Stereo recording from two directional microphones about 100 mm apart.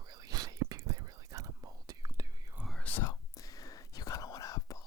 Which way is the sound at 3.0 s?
35° left (ahead or behind).